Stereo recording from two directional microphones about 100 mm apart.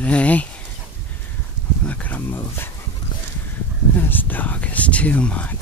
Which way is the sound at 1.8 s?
15° left (ahead or behind).